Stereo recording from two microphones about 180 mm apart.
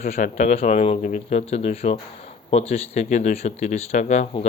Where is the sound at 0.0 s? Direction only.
40° left (ahead or behind).